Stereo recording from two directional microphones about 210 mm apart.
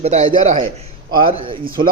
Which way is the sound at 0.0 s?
30° right (ahead or behind).